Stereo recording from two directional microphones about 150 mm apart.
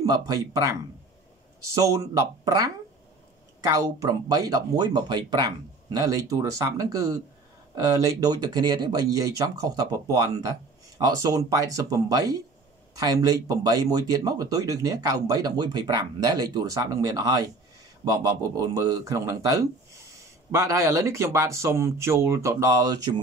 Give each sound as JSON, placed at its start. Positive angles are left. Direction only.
{"t": 0.0, "sound": "speech", "side_deg": -25}